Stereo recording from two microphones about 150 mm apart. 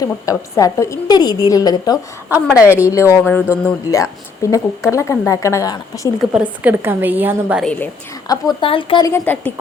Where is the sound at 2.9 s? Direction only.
20° left (ahead or behind).